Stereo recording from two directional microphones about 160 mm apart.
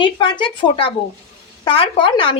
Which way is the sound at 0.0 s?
30° left (ahead or behind).